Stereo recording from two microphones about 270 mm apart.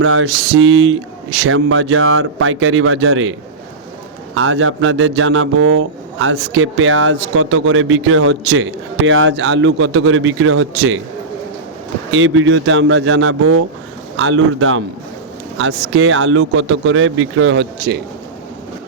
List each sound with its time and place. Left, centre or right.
0.0 s a man's voice: right
4.4 s a man's voice: right
12.1 s a man's voice: right
15.9 s a man's voice: right